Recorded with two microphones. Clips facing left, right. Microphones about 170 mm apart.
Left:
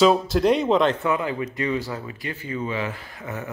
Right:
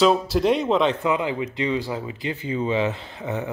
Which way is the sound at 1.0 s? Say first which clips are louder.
Right 1 dB; 15° right (ahead or behind).